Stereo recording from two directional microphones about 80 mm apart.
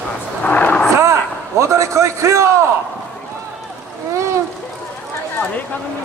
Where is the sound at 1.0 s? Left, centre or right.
Right.